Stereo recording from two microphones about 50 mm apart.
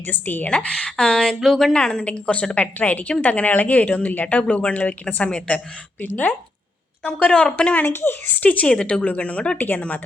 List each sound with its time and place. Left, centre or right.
0.1 s a woman's voice: left
0.4 s a woman's voice: left
1.2 s speech: centre
1.7 s a woman's voice: centre; by 6.3 s left
7.3 s a woman's voice: centre
7.8 s a woman's voice: left
8.6 s a woman's voice: left
9.6 s a woman's voice: left